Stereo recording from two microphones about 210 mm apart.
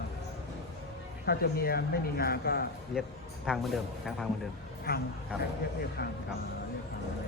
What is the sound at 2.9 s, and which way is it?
A man's voice, centre (ahead or behind).